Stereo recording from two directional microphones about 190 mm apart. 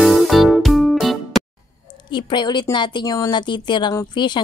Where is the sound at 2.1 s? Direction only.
25° left (ahead or behind).